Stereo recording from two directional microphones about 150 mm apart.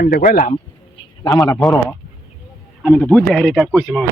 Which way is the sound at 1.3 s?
20° left (ahead or behind).